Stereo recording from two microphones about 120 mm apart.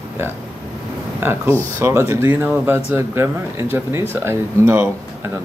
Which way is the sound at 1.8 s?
20° right (ahead or behind).